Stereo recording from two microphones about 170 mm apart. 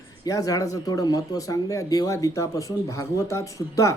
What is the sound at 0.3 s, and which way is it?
Speech, 20° left (ahead or behind).